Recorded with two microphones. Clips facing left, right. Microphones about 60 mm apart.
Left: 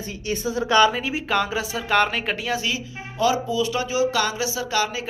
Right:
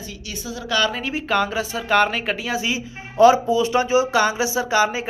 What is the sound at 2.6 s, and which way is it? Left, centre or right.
Speech, right.